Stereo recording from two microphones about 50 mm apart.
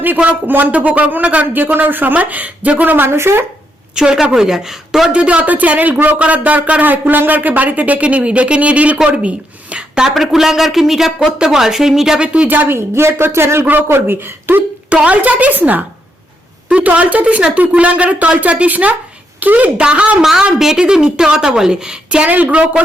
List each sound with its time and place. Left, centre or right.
0.2 s speech: right
1.5 s speech: right
3.1 s speech: right
3.9 s a woman's voice: centre
5.1 s a woman's voice: right; by 12.2 s centre
12.2 s speech: right
12.5 s speech: right
12.7 s speech: right
14.8 s a woman's voice: right
20.2 s a woman's voice: centre